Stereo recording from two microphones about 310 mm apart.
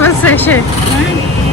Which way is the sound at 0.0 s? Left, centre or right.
Centre.